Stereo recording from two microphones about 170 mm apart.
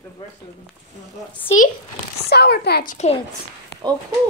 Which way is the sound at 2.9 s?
40° left (ahead or behind).